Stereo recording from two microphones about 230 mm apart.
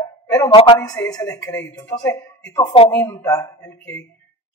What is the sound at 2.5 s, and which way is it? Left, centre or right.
A man's voice, left.